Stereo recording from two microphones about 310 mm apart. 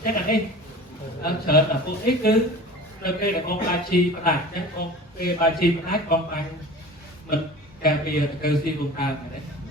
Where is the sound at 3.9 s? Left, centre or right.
Left.